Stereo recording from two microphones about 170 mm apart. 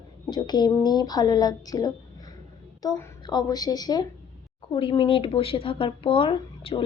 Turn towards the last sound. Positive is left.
turn(degrees=30)  # may be behind; listen again after turning